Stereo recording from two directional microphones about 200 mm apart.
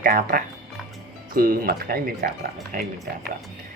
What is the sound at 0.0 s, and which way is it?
Speech, 45° right (ahead or behind).